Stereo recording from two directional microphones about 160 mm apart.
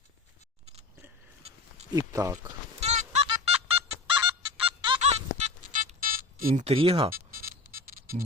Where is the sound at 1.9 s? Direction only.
20° right (ahead or behind).